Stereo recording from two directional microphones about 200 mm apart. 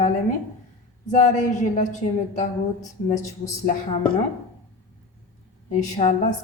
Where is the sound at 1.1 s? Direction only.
40° left (ahead or behind).